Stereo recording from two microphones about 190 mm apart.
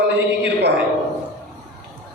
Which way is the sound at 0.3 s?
65° right (ahead or behind).